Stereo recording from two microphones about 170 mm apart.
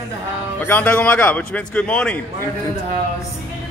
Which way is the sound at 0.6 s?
10° left (ahead or behind).